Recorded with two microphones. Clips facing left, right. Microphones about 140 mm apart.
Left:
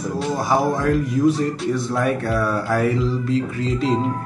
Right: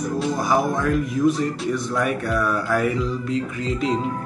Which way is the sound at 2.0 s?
30° left (ahead or behind).